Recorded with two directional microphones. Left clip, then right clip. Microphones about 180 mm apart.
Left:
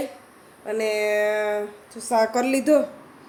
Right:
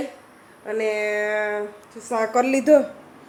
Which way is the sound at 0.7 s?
10° left (ahead or behind).